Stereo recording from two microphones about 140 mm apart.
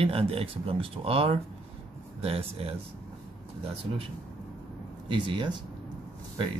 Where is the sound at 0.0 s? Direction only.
45° right (ahead or behind).